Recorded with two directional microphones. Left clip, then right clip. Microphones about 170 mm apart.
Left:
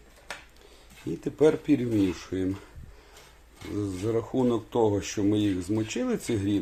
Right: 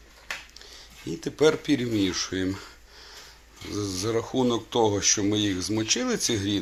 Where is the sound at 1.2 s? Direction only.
20° left (ahead or behind).